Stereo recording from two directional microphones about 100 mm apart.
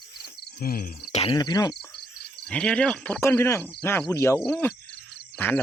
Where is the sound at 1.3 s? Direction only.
40° left (ahead or behind).